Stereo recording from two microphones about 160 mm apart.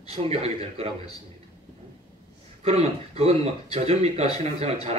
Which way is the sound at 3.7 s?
40° right (ahead or behind).